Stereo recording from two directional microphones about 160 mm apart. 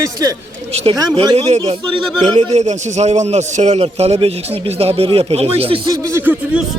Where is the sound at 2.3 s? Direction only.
45° right (ahead or behind).